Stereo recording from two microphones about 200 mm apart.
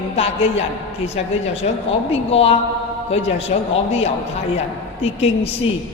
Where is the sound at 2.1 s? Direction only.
30° left (ahead or behind).